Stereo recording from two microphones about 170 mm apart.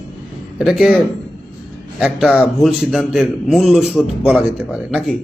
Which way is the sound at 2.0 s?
Centre (ahead or behind).